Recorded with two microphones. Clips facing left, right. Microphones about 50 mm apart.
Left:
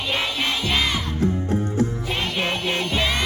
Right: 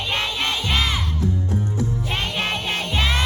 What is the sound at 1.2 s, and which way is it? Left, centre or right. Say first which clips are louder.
Music: left 2 dB; left.